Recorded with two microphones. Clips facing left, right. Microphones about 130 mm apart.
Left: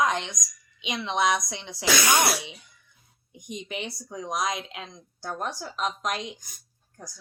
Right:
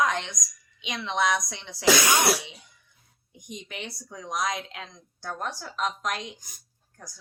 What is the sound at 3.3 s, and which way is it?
Speech, 15° left (ahead or behind).